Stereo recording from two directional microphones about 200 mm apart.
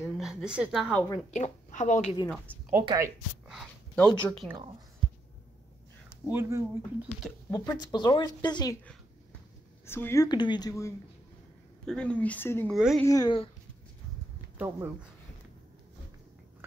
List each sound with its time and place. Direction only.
0.0 s a sound: centre (ahead or behind)
1.3 s a woman's voice: 35° left (ahead or behind)
2.8 s speech: 20° right (ahead or behind)
3.4 s a sound: centre (ahead or behind)
4.2 s speech: 5° left (ahead or behind)
6.2 s speech: 10° right (ahead or behind)
7.5 s speech: 20° left (ahead or behind)
9.8 s speech: 10° left (ahead or behind)
11.8 s speech: 5° left (ahead or behind)
12.7 s speech: 5° right (ahead or behind)
13.0 s speech: 15° left (ahead or behind)
14.6 s speech: 10° right (ahead or behind)